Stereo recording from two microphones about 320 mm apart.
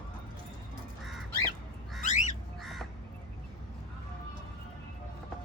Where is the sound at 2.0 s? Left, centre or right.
Left.